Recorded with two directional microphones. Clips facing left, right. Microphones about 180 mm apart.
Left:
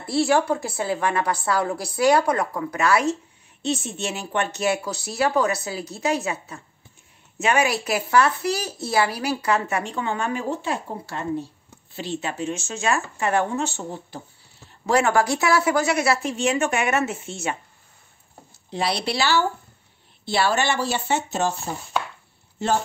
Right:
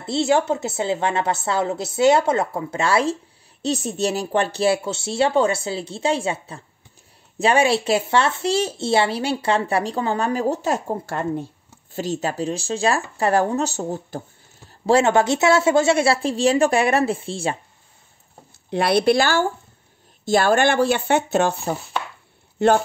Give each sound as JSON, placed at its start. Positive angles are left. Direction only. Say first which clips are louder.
{"t": 0.0, "sound": "a woman's voice", "louder": "right 1 dB", "side_deg": -20}
{"t": 14.9, "sound": "a woman's voice", "louder": "right 3 dB", "side_deg": -25}
{"t": 18.7, "sound": "speech", "louder": "right 8 dB", "side_deg": -55}